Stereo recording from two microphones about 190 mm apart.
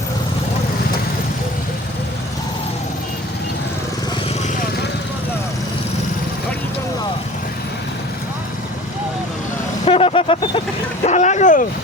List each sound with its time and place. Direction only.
9.8 s vehicle: 30° left (ahead or behind)